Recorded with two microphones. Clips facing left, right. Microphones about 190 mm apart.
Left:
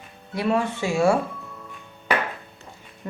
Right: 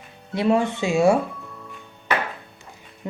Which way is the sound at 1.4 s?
Centre (ahead or behind).